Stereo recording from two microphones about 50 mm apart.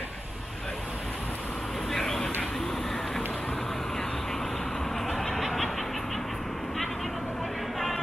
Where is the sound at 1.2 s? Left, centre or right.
Left.